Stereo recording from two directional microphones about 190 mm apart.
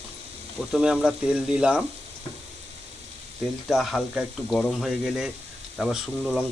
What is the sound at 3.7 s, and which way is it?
Speech, centre (ahead or behind).